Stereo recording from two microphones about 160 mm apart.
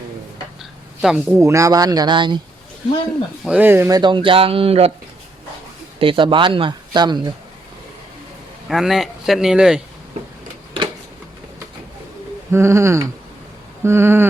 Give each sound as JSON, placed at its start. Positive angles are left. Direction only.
{"t": 0.6, "sound": "a sound", "side_deg": -5}
{"t": 1.4, "sound": "speech", "side_deg": -20}
{"t": 3.4, "sound": "speech", "side_deg": -10}
{"t": 6.0, "sound": "speech", "side_deg": -35}
{"t": 8.7, "sound": "a man's voice", "side_deg": 0}
{"t": 12.5, "sound": "speech", "side_deg": -15}